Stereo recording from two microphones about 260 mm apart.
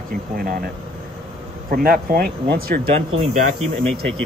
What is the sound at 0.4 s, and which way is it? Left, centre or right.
Speech, right.